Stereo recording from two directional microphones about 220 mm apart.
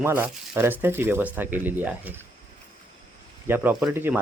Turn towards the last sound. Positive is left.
turn(degrees=-10)  # may be behind; listen again after turning